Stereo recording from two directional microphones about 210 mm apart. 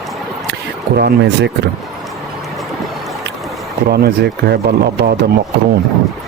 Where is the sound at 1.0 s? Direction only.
50° right (ahead or behind).